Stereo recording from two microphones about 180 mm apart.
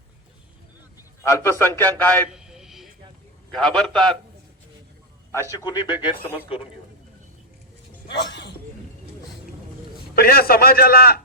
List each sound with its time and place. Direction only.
1.2 s a man's voice: 15° left (ahead or behind)
2.3 s a sound: 5° right (ahead or behind)
3.5 s a man's voice: 5° left (ahead or behind)
5.3 s a man's voice: 15° left (ahead or behind)
8.0 s a sound: 75° left (ahead or behind)
10.2 s a man's voice: 55° left (ahead or behind)